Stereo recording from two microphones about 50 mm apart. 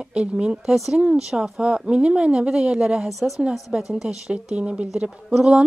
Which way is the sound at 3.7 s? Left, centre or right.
Centre.